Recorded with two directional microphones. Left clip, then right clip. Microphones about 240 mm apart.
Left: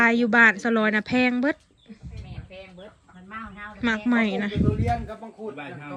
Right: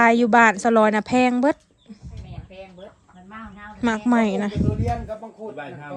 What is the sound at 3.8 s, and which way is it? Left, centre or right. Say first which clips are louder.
Speech: right 3 dB; centre.